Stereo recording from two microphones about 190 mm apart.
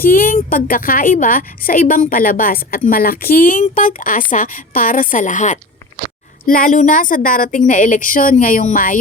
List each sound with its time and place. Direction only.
0.0 s a woman's voice: 50° left (ahead or behind)